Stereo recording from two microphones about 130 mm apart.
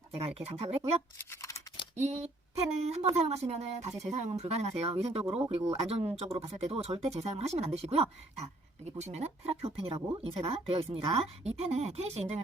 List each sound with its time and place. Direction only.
0.3 s a woman's voice: 50° right (ahead or behind)
1.3 s scissors: 25° left (ahead or behind)
2.0 s a woman's voice: 60° right (ahead or behind)